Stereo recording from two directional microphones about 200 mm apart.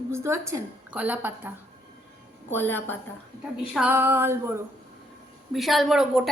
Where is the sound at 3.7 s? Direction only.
10° right (ahead or behind).